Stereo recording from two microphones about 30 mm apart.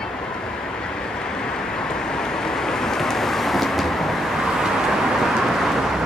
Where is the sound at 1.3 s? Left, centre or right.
Left; by 4.3 s centre.